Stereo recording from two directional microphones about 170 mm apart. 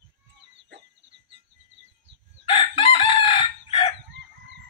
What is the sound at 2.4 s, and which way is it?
Chicken, 35° left (ahead or behind).